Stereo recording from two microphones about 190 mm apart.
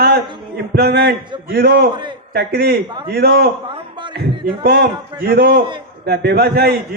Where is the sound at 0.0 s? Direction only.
55° right (ahead or behind).